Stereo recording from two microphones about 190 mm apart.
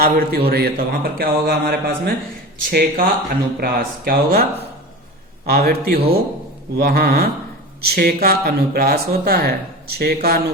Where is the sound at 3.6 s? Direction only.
50° right (ahead or behind).